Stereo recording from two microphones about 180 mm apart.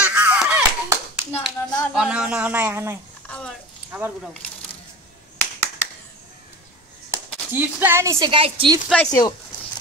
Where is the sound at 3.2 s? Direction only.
5° left (ahead or behind).